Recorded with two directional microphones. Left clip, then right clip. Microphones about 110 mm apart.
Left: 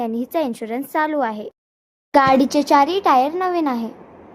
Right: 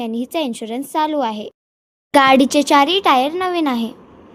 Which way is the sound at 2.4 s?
90° right.